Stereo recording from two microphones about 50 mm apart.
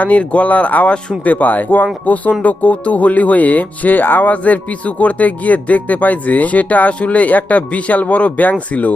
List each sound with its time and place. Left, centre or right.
0.0 s speech: left